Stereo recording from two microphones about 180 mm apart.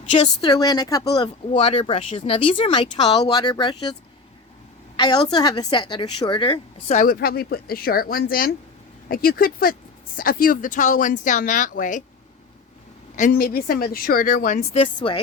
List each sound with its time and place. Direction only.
0.1 s speech: 25° left (ahead or behind)
4.9 s a woman's voice: 20° left (ahead or behind); by 12.0 s 45° left (ahead or behind)
13.3 s a woman's voice: 60° left (ahead or behind); by 15.2 s 30° left (ahead or behind)